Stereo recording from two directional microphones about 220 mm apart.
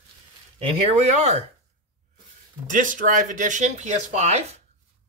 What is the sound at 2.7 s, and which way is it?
Speech, 35° right (ahead or behind).